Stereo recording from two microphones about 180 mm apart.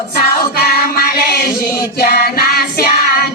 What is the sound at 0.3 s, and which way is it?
Music, 55° left (ahead or behind).